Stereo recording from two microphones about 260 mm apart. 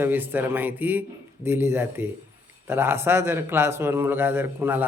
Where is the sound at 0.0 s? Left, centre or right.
Centre.